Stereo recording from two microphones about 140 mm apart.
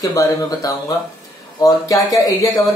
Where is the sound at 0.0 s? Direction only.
25° left (ahead or behind).